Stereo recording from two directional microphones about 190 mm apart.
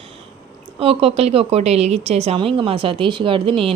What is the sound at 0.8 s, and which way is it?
A woman's voice, 30° right (ahead or behind).